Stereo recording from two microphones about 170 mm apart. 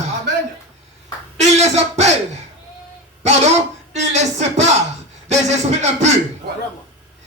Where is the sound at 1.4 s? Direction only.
40° right (ahead or behind).